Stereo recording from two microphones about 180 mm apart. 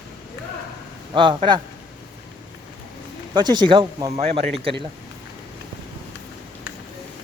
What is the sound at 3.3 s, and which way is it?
Speech, 25° right (ahead or behind).